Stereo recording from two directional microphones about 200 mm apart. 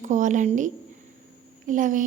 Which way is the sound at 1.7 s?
40° right (ahead or behind).